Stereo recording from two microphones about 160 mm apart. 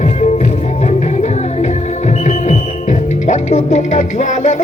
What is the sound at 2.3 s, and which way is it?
Music, 50° left (ahead or behind).